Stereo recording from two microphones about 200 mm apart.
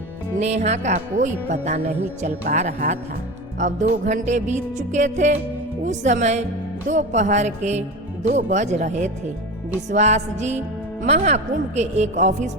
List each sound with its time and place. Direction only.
0.3 s music: 35° right (ahead or behind)